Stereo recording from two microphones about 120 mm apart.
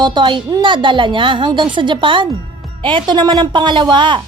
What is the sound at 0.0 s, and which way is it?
A woman's voice, 40° right (ahead or behind).